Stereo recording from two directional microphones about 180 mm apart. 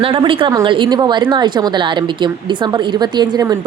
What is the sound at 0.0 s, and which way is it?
A woman's voice, 30° right (ahead or behind).